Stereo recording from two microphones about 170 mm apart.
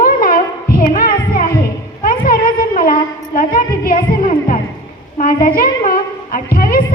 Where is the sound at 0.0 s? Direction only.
60° left (ahead or behind).